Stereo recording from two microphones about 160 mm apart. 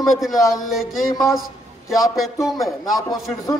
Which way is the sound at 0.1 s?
Centre (ahead or behind).